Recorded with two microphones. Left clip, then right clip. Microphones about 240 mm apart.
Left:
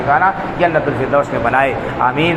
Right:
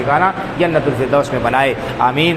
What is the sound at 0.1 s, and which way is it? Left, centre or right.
A man's voice, right.